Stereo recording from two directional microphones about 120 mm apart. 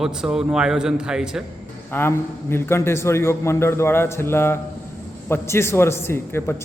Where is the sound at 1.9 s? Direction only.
20° left (ahead or behind).